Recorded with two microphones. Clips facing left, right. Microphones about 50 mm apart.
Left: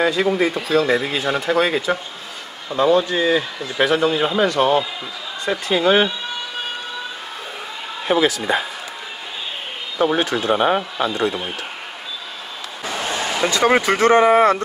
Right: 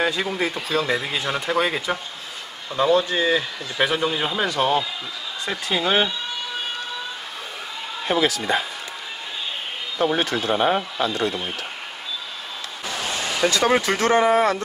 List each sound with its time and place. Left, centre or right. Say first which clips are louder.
0.0 s speech: left 5 dB; centre
8.0 s speech: left 4 dB; centre
9.9 s speech: left 3 dB; centre
12.8 s a sound: left 4 dB; left
13.5 s speech: left 4 dB; centre